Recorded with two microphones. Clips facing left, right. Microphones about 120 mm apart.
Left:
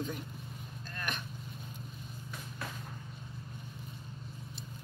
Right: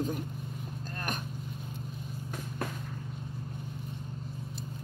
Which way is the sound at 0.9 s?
40° right (ahead or behind).